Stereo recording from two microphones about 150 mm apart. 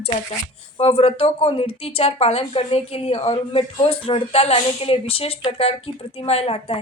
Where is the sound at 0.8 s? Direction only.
40° left (ahead or behind).